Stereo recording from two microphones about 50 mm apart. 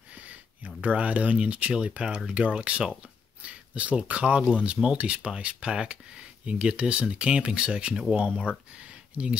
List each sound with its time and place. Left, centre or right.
0.1 s speech: right